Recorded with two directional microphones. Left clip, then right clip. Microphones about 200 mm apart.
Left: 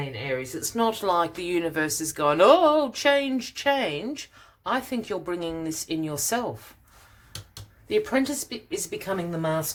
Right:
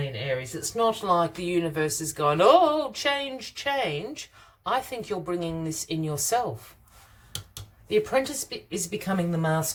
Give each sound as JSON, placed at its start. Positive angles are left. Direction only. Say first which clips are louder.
{"t": 0.6, "sound": "speech", "louder": "even", "side_deg": 35}
{"t": 7.9, "sound": "speech", "louder": "even", "side_deg": 25}